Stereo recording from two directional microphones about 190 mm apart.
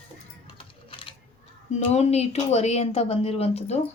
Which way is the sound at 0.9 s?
30° left (ahead or behind).